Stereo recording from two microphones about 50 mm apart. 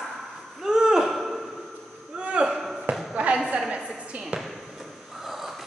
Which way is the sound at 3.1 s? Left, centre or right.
Right.